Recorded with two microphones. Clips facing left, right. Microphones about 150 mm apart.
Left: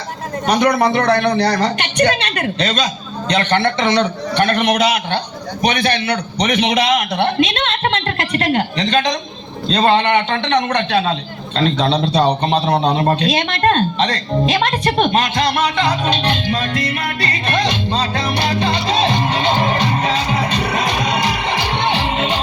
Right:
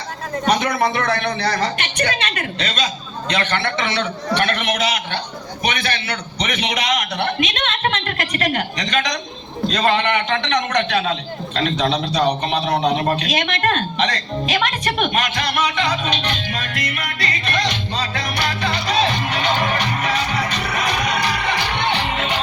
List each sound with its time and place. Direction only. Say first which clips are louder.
0.9 s a woman's voice: left 7 dB; 35° left (ahead or behind)